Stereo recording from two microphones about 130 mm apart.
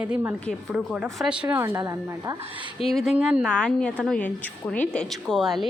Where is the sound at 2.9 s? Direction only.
Centre (ahead or behind).